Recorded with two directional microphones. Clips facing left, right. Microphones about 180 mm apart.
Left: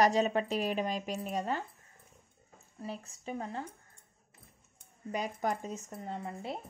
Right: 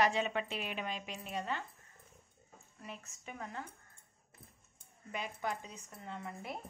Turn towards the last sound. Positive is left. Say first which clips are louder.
# left 5 dB
turn(degrees=30)  # may be behind; listen again after turning